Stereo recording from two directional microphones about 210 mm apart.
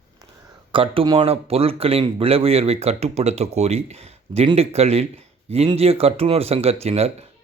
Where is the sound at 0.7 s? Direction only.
25° right (ahead or behind).